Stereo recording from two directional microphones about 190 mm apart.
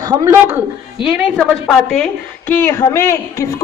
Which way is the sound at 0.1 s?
15° right (ahead or behind).